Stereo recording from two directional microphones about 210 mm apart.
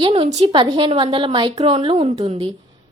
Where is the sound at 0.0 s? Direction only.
25° right (ahead or behind).